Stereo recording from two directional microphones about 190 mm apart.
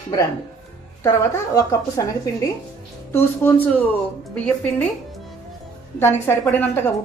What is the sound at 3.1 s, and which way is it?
Speech, 10° left (ahead or behind).